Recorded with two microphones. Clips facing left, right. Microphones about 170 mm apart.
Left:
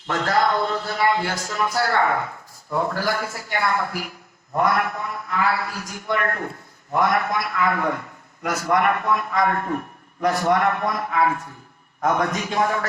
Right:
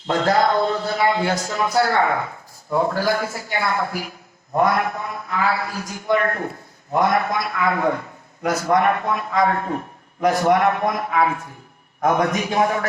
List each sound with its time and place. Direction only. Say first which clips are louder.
0.1 s a man's voice: right 3 dB; 20° right (ahead or behind)